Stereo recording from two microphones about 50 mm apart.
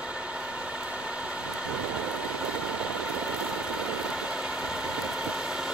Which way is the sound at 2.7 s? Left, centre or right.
Right.